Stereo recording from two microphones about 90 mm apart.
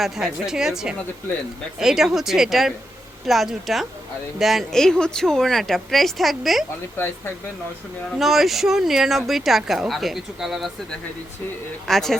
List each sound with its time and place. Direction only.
0.0 s speech: 5° right (ahead or behind)
6.9 s speech: 25° left (ahead or behind)
8.2 s speech: centre (ahead or behind)
11.9 s speech: 5° left (ahead or behind)